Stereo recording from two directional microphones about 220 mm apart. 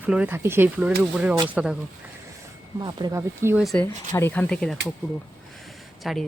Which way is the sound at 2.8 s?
20° right (ahead or behind).